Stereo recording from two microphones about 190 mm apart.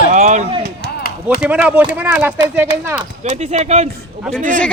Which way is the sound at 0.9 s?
55° left (ahead or behind).